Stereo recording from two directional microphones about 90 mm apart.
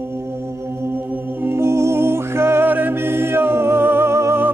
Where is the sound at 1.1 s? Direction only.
25° right (ahead or behind).